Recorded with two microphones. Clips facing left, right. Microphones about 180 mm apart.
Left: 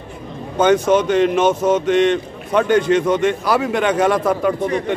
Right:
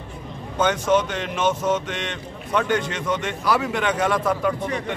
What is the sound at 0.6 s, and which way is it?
A man's voice, 40° left (ahead or behind).